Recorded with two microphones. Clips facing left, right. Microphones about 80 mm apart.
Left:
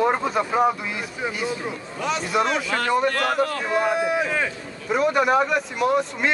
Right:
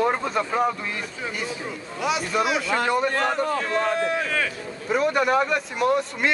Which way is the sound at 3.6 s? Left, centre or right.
Centre.